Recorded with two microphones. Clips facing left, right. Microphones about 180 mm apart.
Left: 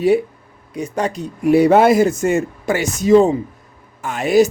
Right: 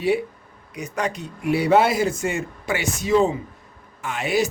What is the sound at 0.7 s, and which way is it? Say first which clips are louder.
Speech: left 5 dB; 30° left (ahead or behind).